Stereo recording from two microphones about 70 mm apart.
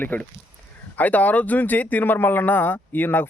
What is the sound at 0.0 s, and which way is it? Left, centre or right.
Speech, left.